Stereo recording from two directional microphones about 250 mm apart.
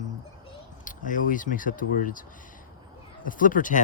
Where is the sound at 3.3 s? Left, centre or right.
Left.